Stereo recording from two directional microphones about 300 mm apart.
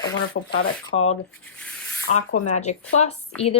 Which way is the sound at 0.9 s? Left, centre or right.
Left.